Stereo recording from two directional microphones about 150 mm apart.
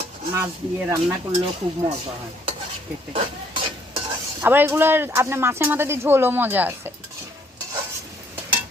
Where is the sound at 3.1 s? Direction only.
35° right (ahead or behind).